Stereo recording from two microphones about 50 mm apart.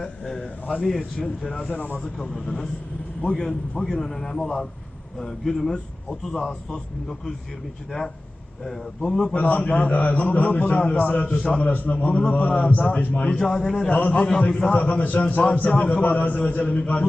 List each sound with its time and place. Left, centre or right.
0.0 s a sound: centre
0.9 s a man's voice: centre
6.3 s a man's voice: centre
6.7 s a man's voice: centre
8.6 s a man's voice: centre
9.3 s a man's voice: left
13.3 s a man's voice: centre
14.7 s a man's voice: left